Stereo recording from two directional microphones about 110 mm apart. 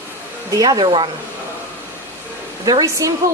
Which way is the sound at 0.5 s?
35° right (ahead or behind).